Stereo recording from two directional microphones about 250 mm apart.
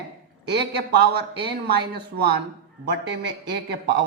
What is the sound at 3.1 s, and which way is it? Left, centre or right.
Speech, right.